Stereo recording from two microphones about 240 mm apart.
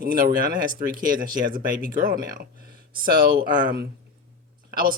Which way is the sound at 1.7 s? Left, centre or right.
Right.